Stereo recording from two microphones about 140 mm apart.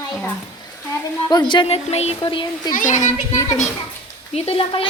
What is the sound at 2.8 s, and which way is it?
Speech, 65° left (ahead or behind).